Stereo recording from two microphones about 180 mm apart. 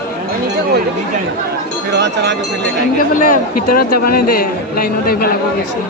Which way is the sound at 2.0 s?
75° right (ahead or behind).